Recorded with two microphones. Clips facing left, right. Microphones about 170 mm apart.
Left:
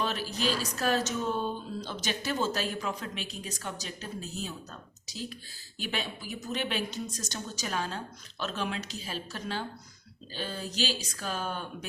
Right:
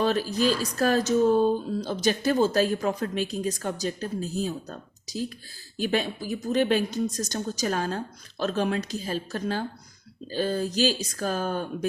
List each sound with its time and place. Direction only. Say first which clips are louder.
0.0 s speech: right 8 dB; 40° right (ahead or behind)